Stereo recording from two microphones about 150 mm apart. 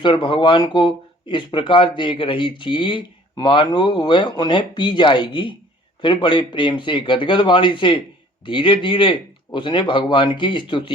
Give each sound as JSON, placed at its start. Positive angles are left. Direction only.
{"t": 0.0, "sound": "speech", "side_deg": 35}